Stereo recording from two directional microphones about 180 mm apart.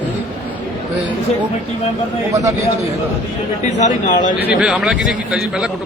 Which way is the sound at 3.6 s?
40° left (ahead or behind).